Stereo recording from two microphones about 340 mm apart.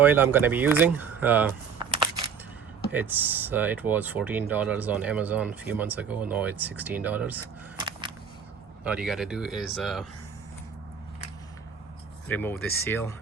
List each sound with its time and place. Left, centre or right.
0.0 s speech: centre
12.3 s speech: centre